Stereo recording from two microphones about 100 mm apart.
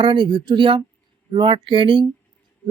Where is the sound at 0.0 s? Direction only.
55° right (ahead or behind).